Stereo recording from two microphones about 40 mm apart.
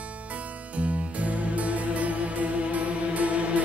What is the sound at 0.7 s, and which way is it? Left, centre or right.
Music, right.